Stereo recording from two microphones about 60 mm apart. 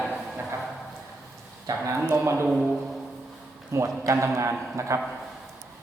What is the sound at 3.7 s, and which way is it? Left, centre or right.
A man's voice, right.